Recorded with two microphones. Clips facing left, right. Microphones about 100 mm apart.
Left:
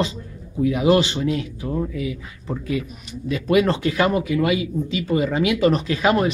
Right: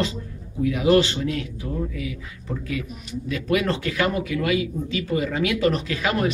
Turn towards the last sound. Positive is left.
turn(degrees=25)  # may be behind; listen again after turning